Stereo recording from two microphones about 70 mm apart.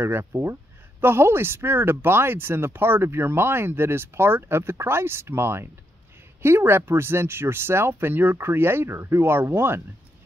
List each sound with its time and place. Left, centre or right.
0.0 s speech: right